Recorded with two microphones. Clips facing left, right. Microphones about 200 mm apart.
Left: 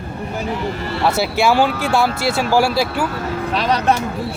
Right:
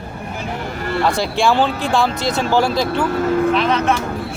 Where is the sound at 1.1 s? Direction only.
5° left (ahead or behind).